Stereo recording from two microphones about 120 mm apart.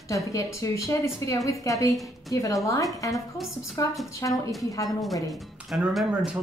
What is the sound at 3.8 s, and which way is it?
Speech, 30° left (ahead or behind).